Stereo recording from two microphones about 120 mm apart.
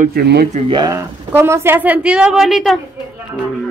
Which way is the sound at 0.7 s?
35° right (ahead or behind).